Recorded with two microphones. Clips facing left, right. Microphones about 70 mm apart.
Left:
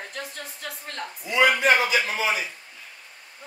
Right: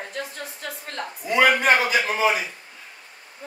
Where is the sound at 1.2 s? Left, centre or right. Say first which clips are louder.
Right 2 dB; right.